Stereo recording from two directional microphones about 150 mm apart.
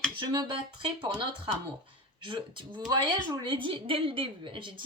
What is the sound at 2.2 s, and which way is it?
A woman's voice, 35° right (ahead or behind).